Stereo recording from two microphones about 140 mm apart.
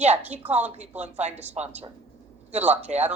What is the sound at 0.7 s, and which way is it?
Speech, 55° right (ahead or behind).